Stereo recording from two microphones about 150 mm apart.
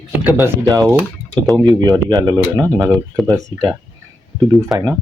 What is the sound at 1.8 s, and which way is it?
Speech, 25° right (ahead or behind).